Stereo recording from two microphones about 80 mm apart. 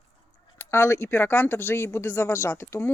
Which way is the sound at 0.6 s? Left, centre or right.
Left.